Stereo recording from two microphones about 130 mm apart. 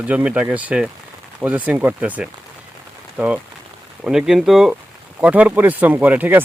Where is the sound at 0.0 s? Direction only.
10° right (ahead or behind).